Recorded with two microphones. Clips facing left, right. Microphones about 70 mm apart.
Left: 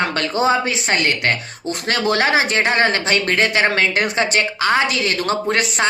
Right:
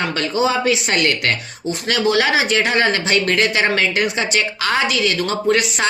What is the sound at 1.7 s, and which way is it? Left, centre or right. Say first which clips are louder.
Speech: right 2 dB; left.